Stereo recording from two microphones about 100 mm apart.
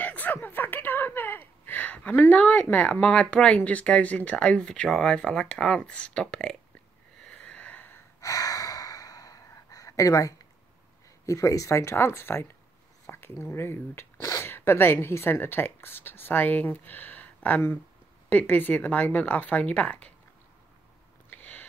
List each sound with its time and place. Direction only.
0.0 s speech: 15° left (ahead or behind)
7.2 s sniff: 10° left (ahead or behind)
8.2 s gasp: 35° left (ahead or behind)
11.2 s speech: 30° left (ahead or behind); by 20.1 s 15° left (ahead or behind)
21.3 s a sound: 20° left (ahead or behind)